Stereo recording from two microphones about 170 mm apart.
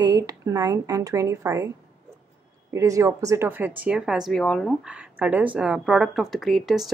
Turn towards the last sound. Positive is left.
turn(degrees=0)  # may be behind; listen again after turning